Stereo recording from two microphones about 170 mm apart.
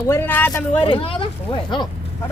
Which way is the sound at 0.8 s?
35° left (ahead or behind).